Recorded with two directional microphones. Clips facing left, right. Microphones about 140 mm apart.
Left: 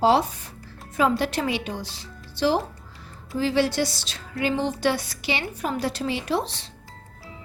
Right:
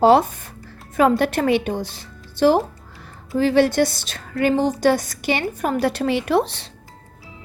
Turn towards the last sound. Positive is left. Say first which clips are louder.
# right 7 dB
turn(degrees=-65)  # may be behind; listen again after turning